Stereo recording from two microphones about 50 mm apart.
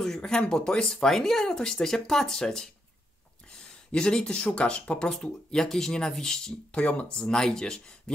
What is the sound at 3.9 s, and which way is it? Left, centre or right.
Speech, centre.